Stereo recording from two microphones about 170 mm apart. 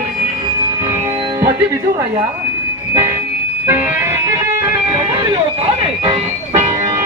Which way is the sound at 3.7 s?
15° right (ahead or behind).